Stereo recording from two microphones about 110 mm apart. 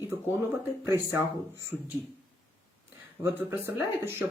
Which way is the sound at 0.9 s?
20° right (ahead or behind).